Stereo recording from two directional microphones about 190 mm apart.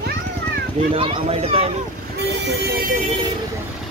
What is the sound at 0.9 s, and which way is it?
Speech, 30° right (ahead or behind).